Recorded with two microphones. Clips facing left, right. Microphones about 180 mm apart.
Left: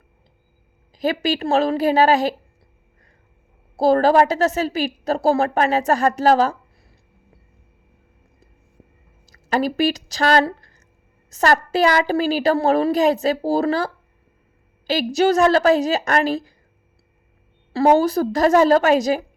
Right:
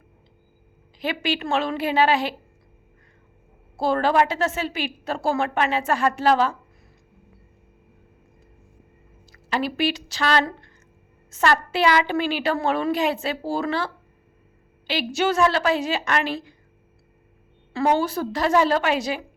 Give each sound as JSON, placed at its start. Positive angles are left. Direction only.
{"t": 0.9, "sound": "a woman's voice", "side_deg": 40}
{"t": 3.8, "sound": "a woman's voice", "side_deg": 40}
{"t": 9.3, "sound": "a woman's voice", "side_deg": 40}
{"t": 17.7, "sound": "a woman's voice", "side_deg": 40}